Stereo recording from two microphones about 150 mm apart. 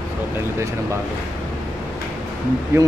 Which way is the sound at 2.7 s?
15° right (ahead or behind).